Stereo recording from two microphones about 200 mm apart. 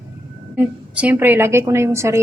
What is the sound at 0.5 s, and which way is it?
A woman's voice, 5° right (ahead or behind).